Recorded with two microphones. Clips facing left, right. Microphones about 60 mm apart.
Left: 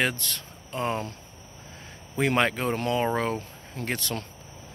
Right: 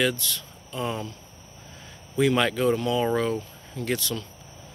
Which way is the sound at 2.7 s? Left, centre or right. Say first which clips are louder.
Right 2 dB; left.